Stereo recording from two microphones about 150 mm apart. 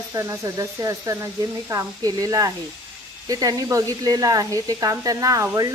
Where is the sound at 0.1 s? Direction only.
20° right (ahead or behind).